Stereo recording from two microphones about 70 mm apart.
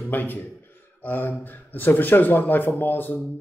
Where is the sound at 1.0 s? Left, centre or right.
Left.